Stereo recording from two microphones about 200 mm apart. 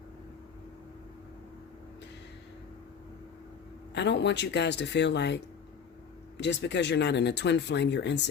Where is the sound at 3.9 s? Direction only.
60° left (ahead or behind).